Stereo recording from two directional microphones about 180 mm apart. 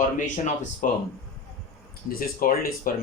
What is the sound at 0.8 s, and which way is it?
Speech, 50° left (ahead or behind).